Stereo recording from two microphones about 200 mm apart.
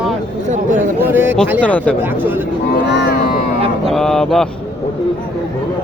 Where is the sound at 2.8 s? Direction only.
55° left (ahead or behind).